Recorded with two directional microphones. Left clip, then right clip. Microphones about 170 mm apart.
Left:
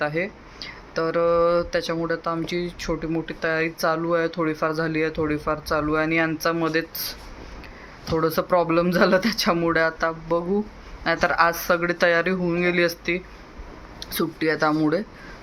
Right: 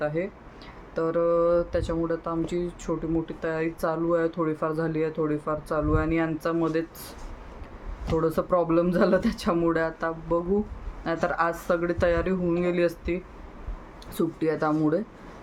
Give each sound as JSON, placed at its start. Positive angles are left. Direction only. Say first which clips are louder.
{"t": 0.0, "sound": "speech", "louder": "left 3 dB", "side_deg": -5}
{"t": 8.2, "sound": "speech", "louder": "left 4 dB", "side_deg": -5}
{"t": 14.2, "sound": "speech", "louder": "left 3 dB", "side_deg": -10}